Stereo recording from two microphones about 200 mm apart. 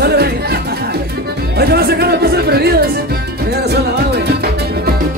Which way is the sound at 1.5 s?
50° right (ahead or behind).